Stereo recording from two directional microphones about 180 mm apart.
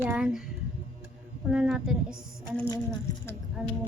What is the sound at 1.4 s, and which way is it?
Speech, 5° right (ahead or behind).